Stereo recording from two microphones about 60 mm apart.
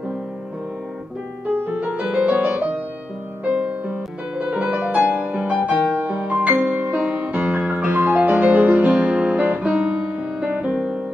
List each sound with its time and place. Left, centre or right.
1.5 s music: right
2.0 s music: right
10.7 s music: centre